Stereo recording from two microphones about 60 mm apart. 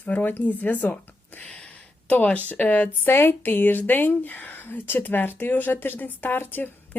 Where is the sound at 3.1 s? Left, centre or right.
Left.